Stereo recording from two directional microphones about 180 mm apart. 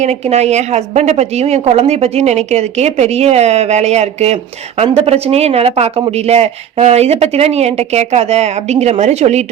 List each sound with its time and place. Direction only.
0.0 s speech: 35° right (ahead or behind)